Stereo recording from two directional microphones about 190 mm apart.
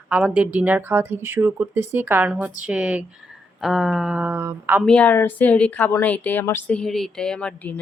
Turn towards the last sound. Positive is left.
turn(degrees=5)  # may be behind; listen again after turning